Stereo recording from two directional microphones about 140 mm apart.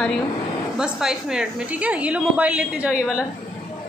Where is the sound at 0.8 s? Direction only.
5° right (ahead or behind).